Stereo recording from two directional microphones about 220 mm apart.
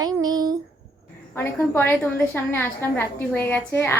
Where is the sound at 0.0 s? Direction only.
15° right (ahead or behind).